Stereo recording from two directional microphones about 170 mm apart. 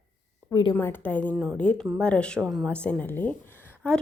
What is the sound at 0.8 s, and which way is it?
A woman's voice, 10° left (ahead or behind).